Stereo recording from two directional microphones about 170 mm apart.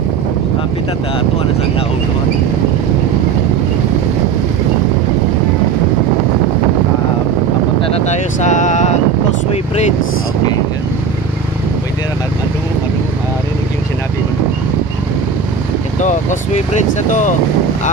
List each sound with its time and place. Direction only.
7.8 s vehicle: 40° left (ahead or behind)
16.0 s vehicle: 45° left (ahead or behind)
17.1 s speech: 45° left (ahead or behind)